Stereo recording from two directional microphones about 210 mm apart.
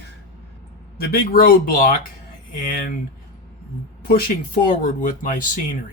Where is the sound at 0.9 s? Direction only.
45° left (ahead or behind).